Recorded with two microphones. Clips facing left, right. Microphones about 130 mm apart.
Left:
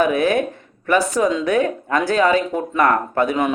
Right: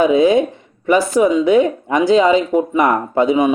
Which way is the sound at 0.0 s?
15° right (ahead or behind).